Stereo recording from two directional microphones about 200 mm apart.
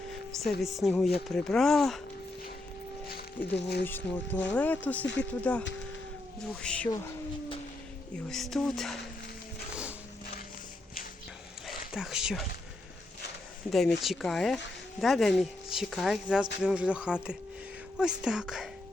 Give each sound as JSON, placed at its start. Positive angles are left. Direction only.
{"t": 0.6, "sound": "speech", "side_deg": 0}
{"t": 3.1, "sound": "music", "side_deg": 50}
{"t": 3.8, "sound": "speech", "side_deg": 10}
{"t": 8.3, "sound": "speech", "side_deg": 0}
{"t": 11.6, "sound": "speech", "side_deg": 0}
{"t": 13.7, "sound": "speech", "side_deg": 0}